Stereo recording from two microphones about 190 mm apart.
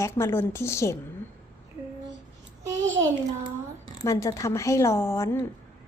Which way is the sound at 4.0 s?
15° left (ahead or behind).